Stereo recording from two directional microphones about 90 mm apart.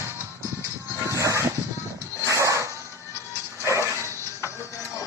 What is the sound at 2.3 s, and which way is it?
Music, 35° right (ahead or behind).